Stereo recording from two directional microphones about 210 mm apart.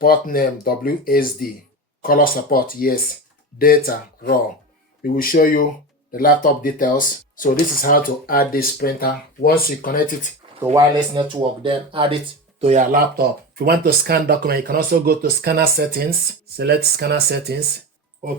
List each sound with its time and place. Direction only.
0.0 s speech: 45° left (ahead or behind)
10.8 s speech: 20° right (ahead or behind); by 17.6 s 50° right (ahead or behind)